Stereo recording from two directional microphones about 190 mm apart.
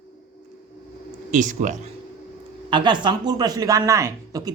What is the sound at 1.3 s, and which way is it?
Speech, 40° right (ahead or behind).